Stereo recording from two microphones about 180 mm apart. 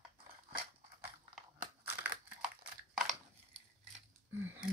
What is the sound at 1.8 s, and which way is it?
Crushing, 10° right (ahead or behind).